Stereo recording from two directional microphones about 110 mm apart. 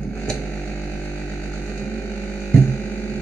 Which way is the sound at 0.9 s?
15° left (ahead or behind).